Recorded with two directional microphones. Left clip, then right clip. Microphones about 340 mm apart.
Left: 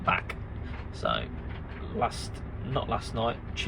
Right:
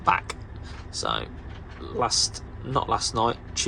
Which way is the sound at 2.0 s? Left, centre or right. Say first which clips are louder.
Right 7 dB; centre.